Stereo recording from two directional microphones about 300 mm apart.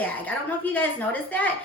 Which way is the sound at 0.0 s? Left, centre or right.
Centre.